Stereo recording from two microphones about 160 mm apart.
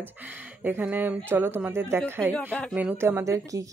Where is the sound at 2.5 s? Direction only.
5° left (ahead or behind).